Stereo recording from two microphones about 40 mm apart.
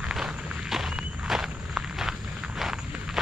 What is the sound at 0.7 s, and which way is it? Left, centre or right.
Walk, centre.